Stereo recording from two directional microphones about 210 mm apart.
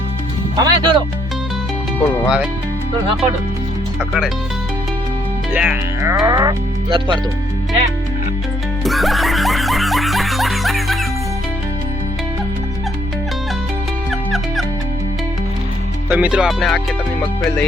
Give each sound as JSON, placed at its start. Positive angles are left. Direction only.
{"t": 0.5, "sound": "speech", "side_deg": -20}
{"t": 2.0, "sound": "speech", "side_deg": 10}
{"t": 5.5, "sound": "speech", "side_deg": -10}
{"t": 8.8, "sound": "music", "side_deg": 0}
{"t": 14.1, "sound": "music", "side_deg": 0}
{"t": 16.0, "sound": "music", "side_deg": -5}